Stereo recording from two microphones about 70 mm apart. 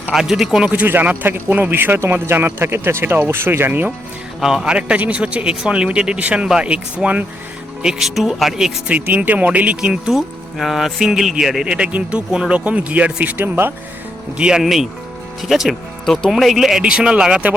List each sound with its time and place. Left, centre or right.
0.1 s speech: centre
0.9 s speech: right
4.4 s speech: centre
7.8 s speech: centre
8.9 s speech: right
10.1 s speech: centre; by 13.7 s right
14.3 s speech: centre
14.6 s speech: centre
16.0 s speech: centre